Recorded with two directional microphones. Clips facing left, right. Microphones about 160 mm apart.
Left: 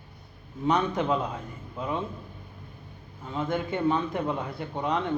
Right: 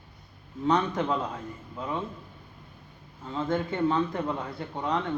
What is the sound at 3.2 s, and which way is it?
Speech, 15° left (ahead or behind).